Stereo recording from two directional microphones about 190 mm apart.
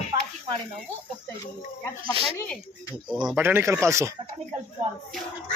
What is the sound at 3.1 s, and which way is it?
Speech, 5° right (ahead or behind).